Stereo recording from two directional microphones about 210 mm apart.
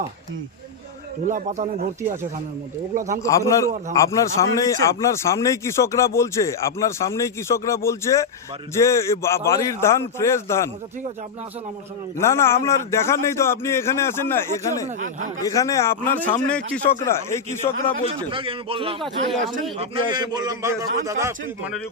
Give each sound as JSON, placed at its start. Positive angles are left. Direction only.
{"t": 1.3, "sound": "speech", "side_deg": -35}
{"t": 3.2, "sound": "a man's voice", "side_deg": 15}
{"t": 12.1, "sound": "a man's voice", "side_deg": 15}
{"t": 14.8, "sound": "speech", "side_deg": -35}
{"t": 15.4, "sound": "a man's voice", "side_deg": 15}
{"t": 18.3, "sound": "a man's voice", "side_deg": -25}
{"t": 19.0, "sound": "speech", "side_deg": 0}
{"t": 19.8, "sound": "a man's voice", "side_deg": -20}